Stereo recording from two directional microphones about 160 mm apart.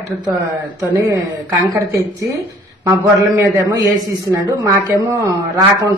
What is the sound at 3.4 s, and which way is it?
A woman's voice, 20° right (ahead or behind).